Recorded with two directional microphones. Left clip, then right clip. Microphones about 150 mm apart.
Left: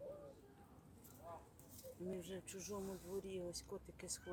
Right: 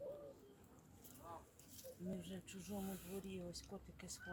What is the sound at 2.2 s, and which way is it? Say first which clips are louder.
Speech: left 4 dB; 15° left (ahead or behind).